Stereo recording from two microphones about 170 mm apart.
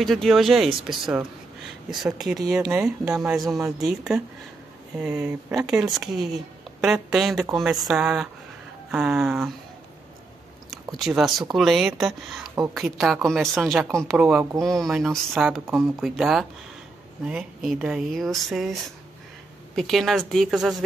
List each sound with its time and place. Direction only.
0.0 s speech: centre (ahead or behind)
1.9 s speech: centre (ahead or behind)
11.0 s speech: centre (ahead or behind)
12.4 s a sound: 20° right (ahead or behind)
13.0 s speech: centre (ahead or behind)